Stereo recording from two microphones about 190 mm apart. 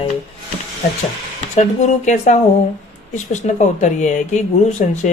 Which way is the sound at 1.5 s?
40° left (ahead or behind).